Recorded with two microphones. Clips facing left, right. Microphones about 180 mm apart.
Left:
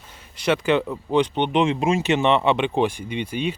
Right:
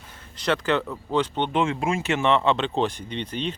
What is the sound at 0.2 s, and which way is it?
Speech, 10° left (ahead or behind).